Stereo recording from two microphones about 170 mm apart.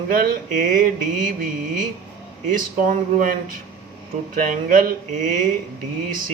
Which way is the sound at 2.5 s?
55° right (ahead or behind).